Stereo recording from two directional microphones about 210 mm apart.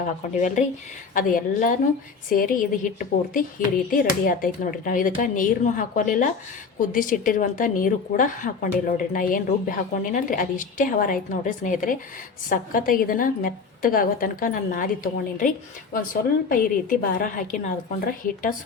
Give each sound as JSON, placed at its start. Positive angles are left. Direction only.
{"t": 0.0, "sound": "a woman's voice", "side_deg": 35}
{"t": 16.5, "sound": "a woman's voice", "side_deg": 40}